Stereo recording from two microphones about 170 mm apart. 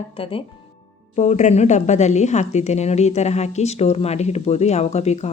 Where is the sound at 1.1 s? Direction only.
45° left (ahead or behind).